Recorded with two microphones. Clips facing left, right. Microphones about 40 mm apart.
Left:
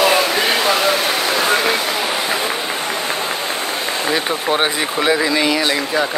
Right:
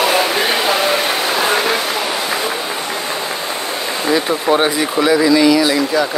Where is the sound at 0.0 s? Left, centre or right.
Centre.